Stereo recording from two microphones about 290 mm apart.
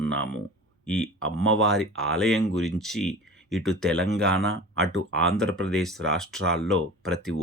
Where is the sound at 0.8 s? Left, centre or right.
Centre.